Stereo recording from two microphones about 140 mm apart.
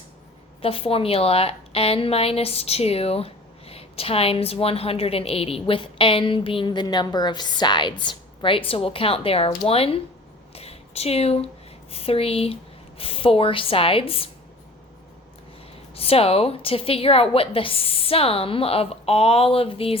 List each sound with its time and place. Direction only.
0.6 s a woman's voice: 40° left (ahead or behind)
10.5 s a sound: 45° left (ahead or behind)
11.9 s a woman's voice: 45° left (ahead or behind)
16.0 s a woman's voice: 45° left (ahead or behind)